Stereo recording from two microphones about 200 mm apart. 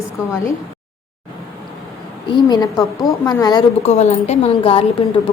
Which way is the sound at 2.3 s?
20° left (ahead or behind).